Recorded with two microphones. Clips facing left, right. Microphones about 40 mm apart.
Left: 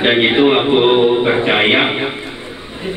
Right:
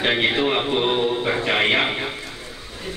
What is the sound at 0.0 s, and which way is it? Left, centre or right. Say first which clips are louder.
A man's voice: left 8 dB; left.